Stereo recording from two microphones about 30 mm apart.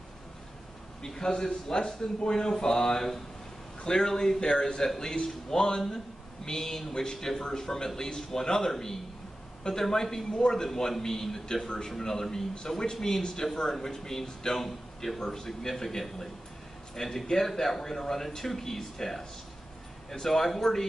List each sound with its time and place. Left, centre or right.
1.0 s speech: centre
4.4 s speech: left
4.8 s speech: centre